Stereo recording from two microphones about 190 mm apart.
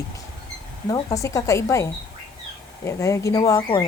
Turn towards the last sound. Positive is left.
turn(degrees=20)  # may be behind; listen again after turning